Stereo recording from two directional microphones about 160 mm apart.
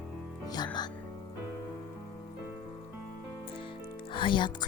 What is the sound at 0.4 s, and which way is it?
Music, 25° left (ahead or behind).